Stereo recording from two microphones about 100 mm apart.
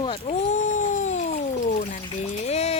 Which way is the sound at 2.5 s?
90° left.